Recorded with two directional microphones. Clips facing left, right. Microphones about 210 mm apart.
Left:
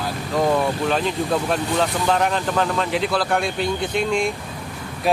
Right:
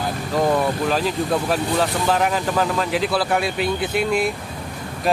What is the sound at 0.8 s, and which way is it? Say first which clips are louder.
Speech: even; centre (ahead or behind).